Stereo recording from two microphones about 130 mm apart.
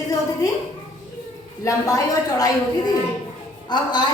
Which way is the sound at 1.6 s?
25° left (ahead or behind).